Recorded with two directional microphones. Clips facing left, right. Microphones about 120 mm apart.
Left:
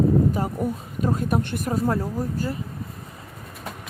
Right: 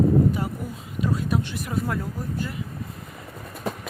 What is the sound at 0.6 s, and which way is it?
Speech, 45° left (ahead or behind).